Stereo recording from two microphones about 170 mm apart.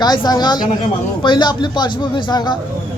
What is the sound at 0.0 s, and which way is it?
A man's voice, 25° left (ahead or behind).